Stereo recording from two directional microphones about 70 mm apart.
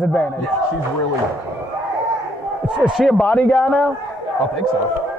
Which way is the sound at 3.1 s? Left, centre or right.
Centre.